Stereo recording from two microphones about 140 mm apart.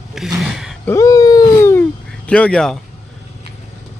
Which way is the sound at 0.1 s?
Centre (ahead or behind).